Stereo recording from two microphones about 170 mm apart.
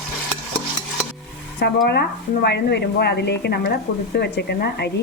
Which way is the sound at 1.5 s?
70° left (ahead or behind).